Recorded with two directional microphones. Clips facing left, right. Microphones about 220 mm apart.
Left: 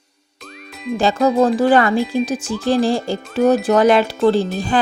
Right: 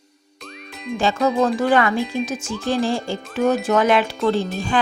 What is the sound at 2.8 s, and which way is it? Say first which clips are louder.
Speech: left 4 dB; 35° left (ahead or behind).